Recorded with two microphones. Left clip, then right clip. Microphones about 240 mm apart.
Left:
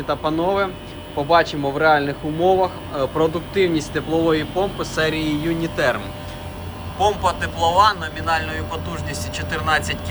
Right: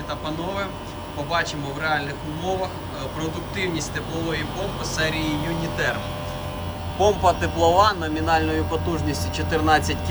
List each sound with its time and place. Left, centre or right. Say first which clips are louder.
0.1 s speech: left 9 dB; centre
7.0 s speech: even; right